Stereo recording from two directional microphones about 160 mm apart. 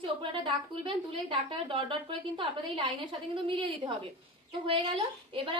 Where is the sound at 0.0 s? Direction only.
35° right (ahead or behind).